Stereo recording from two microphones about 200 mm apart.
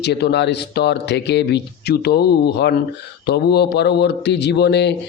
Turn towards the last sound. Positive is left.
turn(degrees=60)  # may be behind; listen again after turning